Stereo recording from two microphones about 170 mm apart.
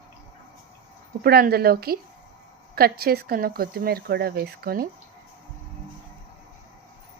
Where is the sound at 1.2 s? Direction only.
65° right (ahead or behind).